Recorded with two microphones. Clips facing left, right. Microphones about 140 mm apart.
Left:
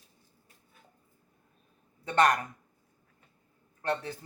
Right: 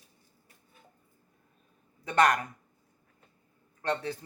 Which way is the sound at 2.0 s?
30° left (ahead or behind).